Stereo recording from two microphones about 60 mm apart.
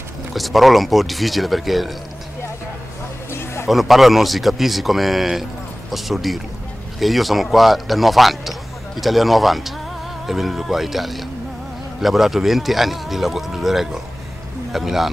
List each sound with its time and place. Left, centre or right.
0.3 s speech: centre
3.3 s a sound: left
3.6 s speech: centre